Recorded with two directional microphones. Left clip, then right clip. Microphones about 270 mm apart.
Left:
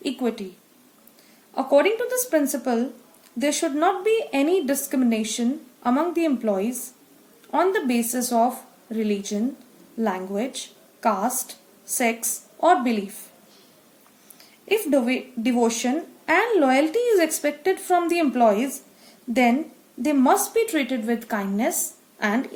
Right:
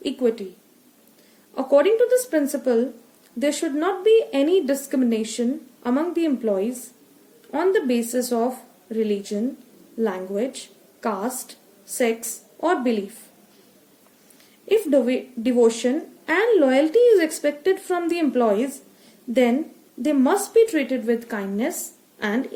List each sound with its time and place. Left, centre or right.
0.0 s a woman's voice: centre
1.5 s a woman's voice: centre
12.5 s a woman's voice: centre
14.7 s a woman's voice: centre